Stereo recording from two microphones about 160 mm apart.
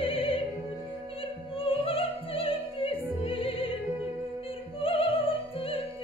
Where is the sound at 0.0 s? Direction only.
35° left (ahead or behind).